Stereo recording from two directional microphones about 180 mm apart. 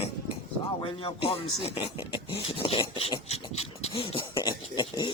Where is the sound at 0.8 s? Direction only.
30° left (ahead or behind).